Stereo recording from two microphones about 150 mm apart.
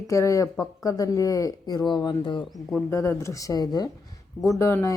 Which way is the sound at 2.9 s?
20° left (ahead or behind).